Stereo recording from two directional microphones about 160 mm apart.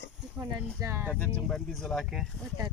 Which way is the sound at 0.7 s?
15° right (ahead or behind).